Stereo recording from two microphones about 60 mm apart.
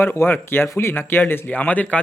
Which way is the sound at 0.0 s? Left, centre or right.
Left.